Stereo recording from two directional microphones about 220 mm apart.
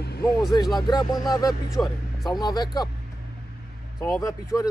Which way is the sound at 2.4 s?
20° left (ahead or behind).